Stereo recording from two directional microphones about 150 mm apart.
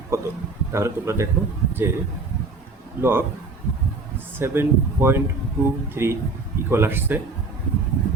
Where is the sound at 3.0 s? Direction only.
15° right (ahead or behind).